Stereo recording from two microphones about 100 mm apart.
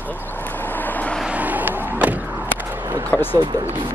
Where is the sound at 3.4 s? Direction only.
45° right (ahead or behind).